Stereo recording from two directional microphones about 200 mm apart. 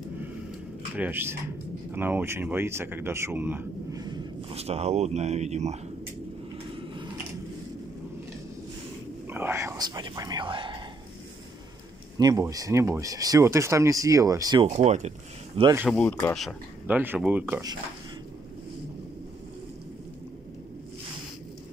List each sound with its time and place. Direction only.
0.9 s speech: 10° right (ahead or behind); by 5.8 s 35° right (ahead or behind)
9.3 s speech: 10° right (ahead or behind)
12.2 s speech: 20° right (ahead or behind)
14.7 s speech: 35° right (ahead or behind)
15.9 s speech: 10° left (ahead or behind)
16.3 s speech: 5° right (ahead or behind)